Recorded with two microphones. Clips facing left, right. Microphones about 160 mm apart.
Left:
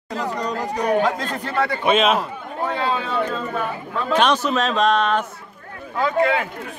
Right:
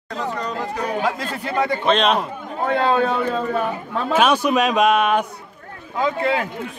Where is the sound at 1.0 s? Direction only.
5° right (ahead or behind).